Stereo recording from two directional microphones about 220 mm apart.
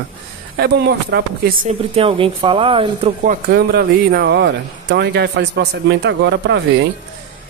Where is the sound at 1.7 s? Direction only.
25° right (ahead or behind).